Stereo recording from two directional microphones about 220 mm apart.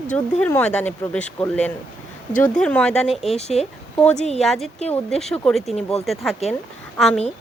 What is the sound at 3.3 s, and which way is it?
A woman's voice, 30° left (ahead or behind).